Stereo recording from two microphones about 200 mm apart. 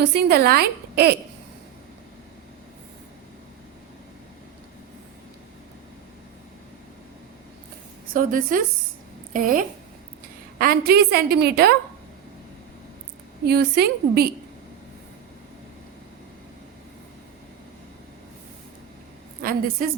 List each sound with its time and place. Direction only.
0.0 s a woman's voice: 55° right (ahead or behind)
8.1 s a woman's voice: 45° right (ahead or behind)
13.5 s a woman's voice: 55° right (ahead or behind)
19.4 s a woman's voice: 45° right (ahead or behind)